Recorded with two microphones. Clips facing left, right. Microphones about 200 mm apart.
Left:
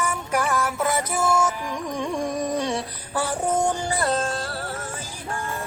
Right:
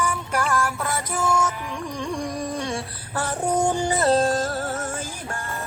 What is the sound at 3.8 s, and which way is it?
Music, 20° right (ahead or behind).